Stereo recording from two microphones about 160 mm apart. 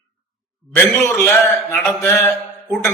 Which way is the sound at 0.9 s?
15° left (ahead or behind).